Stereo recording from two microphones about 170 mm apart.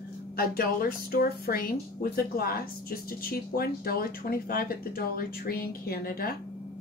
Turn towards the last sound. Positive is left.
turn(degrees=60)  # may be behind; listen again after turning